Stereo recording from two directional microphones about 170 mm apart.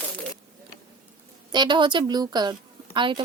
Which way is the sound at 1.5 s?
25° right (ahead or behind).